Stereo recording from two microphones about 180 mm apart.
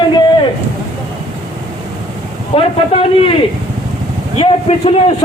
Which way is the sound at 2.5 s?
35° left (ahead or behind).